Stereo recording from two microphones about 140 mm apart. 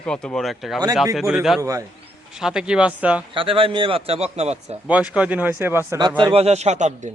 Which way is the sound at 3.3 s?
40° right (ahead or behind).